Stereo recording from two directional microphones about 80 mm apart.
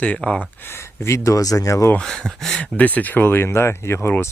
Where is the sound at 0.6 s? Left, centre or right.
Left.